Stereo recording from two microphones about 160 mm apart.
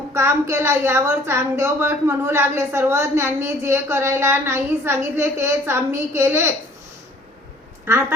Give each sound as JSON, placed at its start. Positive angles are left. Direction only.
{"t": 0.1, "sound": "a woman's voice", "side_deg": -15}
{"t": 7.9, "sound": "a woman's voice", "side_deg": -15}